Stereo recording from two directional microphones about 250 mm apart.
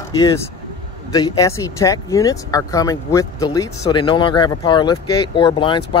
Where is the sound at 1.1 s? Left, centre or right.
Centre.